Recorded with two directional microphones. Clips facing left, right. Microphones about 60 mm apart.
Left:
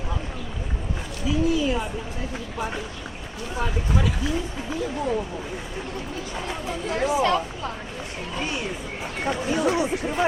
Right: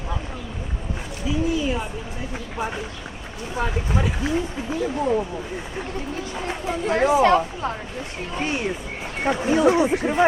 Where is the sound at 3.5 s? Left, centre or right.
Centre.